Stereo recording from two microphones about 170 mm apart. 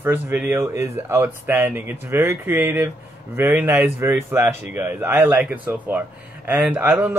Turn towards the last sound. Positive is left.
turn(degrees=-15)  # may be behind; listen again after turning